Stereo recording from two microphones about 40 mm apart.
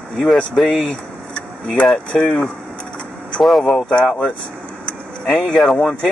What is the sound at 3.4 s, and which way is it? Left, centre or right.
Speech, centre.